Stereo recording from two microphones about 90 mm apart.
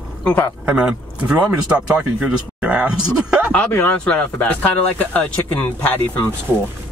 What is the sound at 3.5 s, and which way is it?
Speech, 15° left (ahead or behind).